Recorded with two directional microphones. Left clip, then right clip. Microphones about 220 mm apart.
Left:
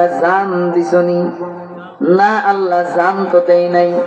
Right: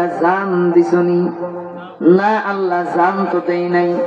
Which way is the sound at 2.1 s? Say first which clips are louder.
Left 4 dB; 35° left (ahead or behind).